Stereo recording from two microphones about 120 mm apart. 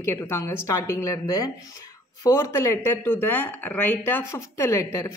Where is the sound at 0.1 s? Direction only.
20° left (ahead or behind).